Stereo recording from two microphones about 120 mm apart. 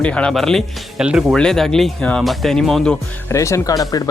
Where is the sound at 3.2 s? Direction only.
25° left (ahead or behind).